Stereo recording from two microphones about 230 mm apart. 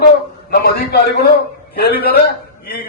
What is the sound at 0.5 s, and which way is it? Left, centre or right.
A man's voice, left.